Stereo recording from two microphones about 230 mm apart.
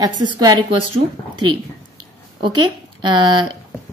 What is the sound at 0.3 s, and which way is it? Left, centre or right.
Speech, centre.